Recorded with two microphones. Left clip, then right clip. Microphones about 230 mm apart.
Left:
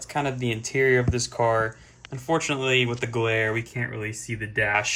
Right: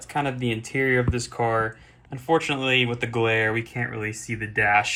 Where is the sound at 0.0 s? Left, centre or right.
Centre.